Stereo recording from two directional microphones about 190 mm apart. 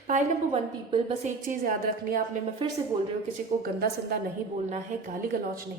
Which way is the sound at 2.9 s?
25° right (ahead or behind).